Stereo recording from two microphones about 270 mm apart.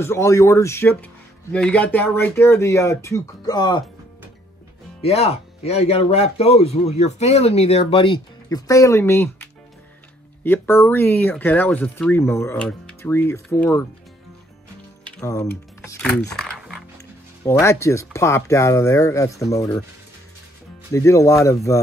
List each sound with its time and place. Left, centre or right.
0.0 s speech: centre
5.0 s speech: left
10.4 s speech: centre
15.1 s speech: centre
16.3 s music: centre
17.5 s speech: centre
20.9 s speech: centre